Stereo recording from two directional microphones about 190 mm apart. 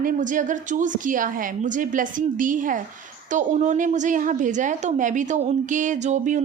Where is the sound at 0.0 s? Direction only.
40° right (ahead or behind).